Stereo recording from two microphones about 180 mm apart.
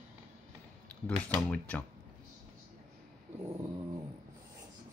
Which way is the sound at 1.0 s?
5° left (ahead or behind).